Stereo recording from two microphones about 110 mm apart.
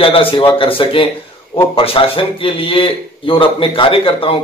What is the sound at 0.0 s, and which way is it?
A man's voice, 55° left (ahead or behind).